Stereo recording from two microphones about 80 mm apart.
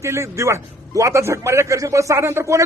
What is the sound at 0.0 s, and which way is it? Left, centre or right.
A man's voice, right.